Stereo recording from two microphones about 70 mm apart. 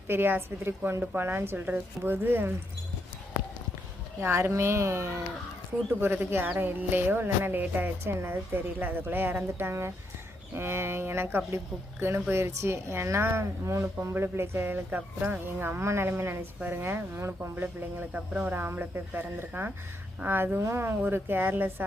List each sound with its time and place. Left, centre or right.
0.1 s a woman's voice: right
4.2 s a woman's voice: right
18.1 s a woman's voice: centre